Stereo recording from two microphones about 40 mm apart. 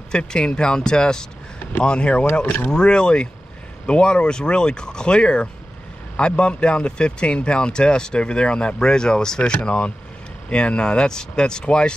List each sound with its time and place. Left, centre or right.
0.1 s speech: left
9.6 s speech: left